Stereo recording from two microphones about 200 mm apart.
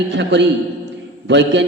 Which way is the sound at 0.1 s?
60° right (ahead or behind).